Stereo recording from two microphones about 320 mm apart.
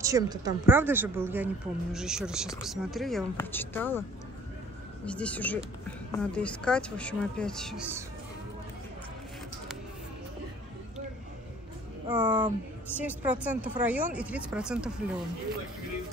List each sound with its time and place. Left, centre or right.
0.0 s speech: centre
5.0 s speech: centre
12.1 s speech: centre